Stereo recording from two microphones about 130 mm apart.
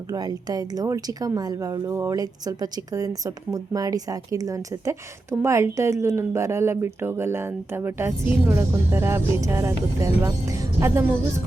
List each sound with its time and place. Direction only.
0.1 s speech: 30° right (ahead or behind)